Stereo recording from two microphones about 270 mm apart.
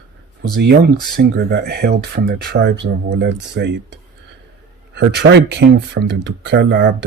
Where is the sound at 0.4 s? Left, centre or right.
Right.